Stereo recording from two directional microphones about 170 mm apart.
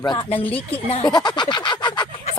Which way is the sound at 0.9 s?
25° left (ahead or behind).